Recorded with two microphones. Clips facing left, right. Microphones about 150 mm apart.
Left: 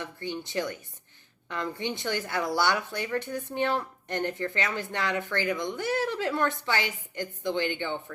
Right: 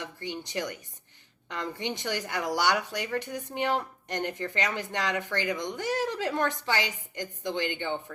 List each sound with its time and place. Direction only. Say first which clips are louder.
0.0 s speech: left 2 dB; 15° right (ahead or behind)
2.0 s speech: left 2 dB; 15° right (ahead or behind)